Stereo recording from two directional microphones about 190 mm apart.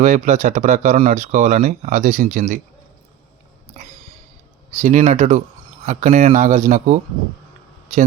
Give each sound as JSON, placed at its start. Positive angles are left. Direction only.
{"t": 0.0, "sound": "speech", "side_deg": -40}
{"t": 3.8, "sound": "a sound", "side_deg": -35}
{"t": 4.8, "sound": "speech", "side_deg": -40}